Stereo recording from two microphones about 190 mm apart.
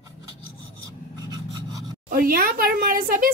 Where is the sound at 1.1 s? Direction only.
20° right (ahead or behind).